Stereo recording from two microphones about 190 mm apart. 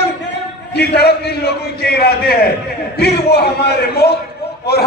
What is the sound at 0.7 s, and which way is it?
A man's voice, 60° left (ahead or behind).